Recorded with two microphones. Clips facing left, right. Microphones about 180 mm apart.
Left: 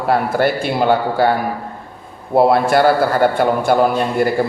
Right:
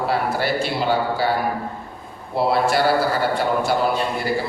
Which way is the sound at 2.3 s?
55° left (ahead or behind).